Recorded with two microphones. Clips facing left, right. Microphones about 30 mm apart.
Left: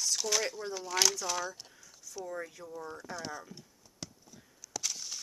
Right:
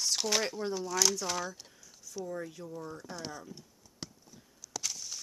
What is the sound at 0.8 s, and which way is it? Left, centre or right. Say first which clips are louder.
Speech: left 2 dB; left.